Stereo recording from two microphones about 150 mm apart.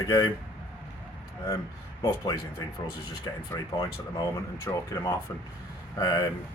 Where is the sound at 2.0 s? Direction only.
35° left (ahead or behind).